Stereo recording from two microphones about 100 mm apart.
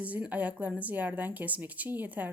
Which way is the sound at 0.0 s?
15° right (ahead or behind).